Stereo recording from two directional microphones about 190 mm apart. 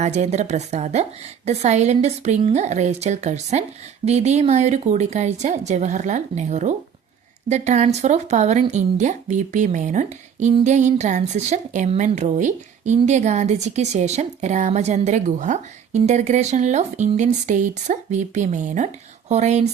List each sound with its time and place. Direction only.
0.0 s a woman's voice: 35° right (ahead or behind)